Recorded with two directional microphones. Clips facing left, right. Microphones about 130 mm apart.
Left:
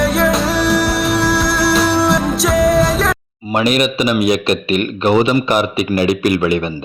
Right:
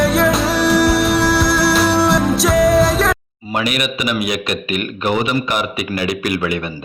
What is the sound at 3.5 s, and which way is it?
A man's voice, 30° left (ahead or behind).